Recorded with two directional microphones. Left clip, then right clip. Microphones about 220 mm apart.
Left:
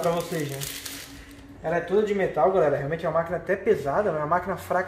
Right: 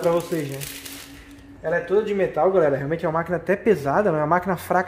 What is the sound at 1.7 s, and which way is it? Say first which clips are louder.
A man's voice: right 2 dB; 40° right (ahead or behind).